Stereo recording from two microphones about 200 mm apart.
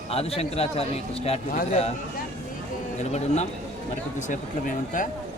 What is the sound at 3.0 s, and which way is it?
A man's voice, 35° left (ahead or behind).